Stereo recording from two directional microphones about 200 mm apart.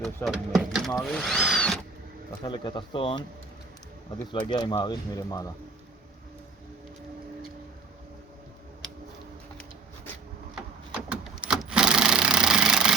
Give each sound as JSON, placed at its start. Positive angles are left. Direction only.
{"t": 0.0, "sound": "speech", "side_deg": 0}
{"t": 2.4, "sound": "speech", "side_deg": 25}
{"t": 4.3, "sound": "speech", "side_deg": 20}
{"t": 11.1, "sound": "a sound", "side_deg": -5}